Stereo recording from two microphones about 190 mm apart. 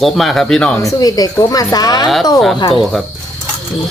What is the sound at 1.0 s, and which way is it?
Speech, 20° left (ahead or behind).